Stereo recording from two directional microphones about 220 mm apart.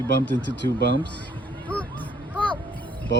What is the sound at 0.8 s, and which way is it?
Speech, 50° right (ahead or behind).